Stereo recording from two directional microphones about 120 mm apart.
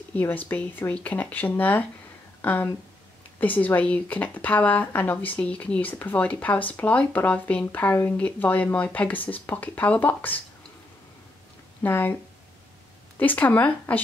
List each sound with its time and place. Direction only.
0.1 s speech: 15° left (ahead or behind)
11.8 s speech: 15° left (ahead or behind)
13.2 s speech: 15° left (ahead or behind)